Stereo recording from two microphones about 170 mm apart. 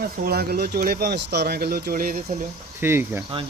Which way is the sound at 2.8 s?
15° right (ahead or behind).